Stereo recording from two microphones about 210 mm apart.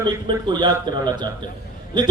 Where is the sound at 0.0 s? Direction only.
20° right (ahead or behind).